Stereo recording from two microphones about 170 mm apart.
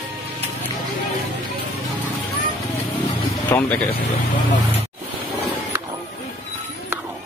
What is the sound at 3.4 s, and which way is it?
Speech, 10° left (ahead or behind).